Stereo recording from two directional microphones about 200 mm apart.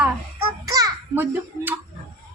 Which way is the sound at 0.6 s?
20° right (ahead or behind).